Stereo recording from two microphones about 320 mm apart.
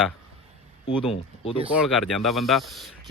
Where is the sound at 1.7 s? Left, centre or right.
Centre.